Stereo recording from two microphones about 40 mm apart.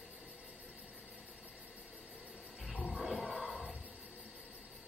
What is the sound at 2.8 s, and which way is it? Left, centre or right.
Music, centre.